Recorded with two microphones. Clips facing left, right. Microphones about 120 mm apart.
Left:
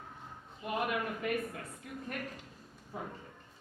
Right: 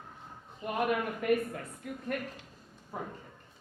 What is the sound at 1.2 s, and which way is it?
Speech, 50° right (ahead or behind).